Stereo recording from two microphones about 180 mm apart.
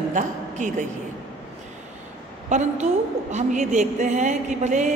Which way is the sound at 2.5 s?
40° right (ahead or behind).